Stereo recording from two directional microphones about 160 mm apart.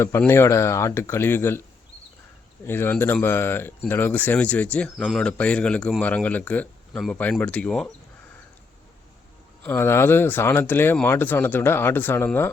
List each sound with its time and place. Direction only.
0.0 s speech: 15° left (ahead or behind)
2.6 s speech: 15° left (ahead or behind)
9.6 s speech: 15° left (ahead or behind)